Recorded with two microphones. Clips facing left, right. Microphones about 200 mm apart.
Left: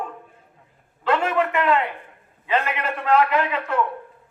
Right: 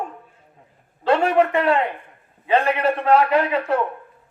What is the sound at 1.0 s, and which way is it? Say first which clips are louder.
A man's voice: right 4 dB; 35° right (ahead or behind).